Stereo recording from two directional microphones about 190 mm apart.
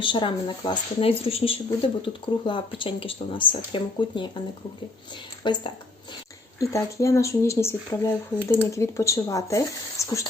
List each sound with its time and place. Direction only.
0.0 s speech: 25° left (ahead or behind)
5.4 s a woman's voice: 25° left (ahead or behind)